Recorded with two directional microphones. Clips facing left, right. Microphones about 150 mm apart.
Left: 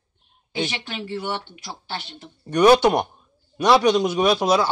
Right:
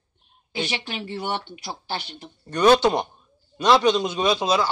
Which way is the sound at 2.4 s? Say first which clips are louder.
Left 2 dB; 10° left (ahead or behind).